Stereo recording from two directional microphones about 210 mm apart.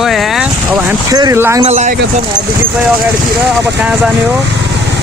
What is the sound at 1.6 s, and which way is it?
Speech, 30° right (ahead or behind).